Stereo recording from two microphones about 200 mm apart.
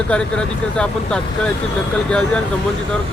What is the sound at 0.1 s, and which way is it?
Speech, 5° left (ahead or behind).